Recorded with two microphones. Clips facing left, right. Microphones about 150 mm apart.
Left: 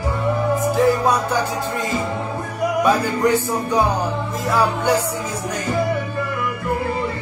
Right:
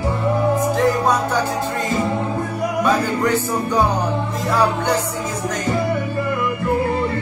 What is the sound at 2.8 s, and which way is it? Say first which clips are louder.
Music: left 1 dB; 10° left (ahead or behind).